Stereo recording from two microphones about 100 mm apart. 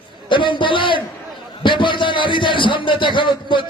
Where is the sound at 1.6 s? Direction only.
55° left (ahead or behind).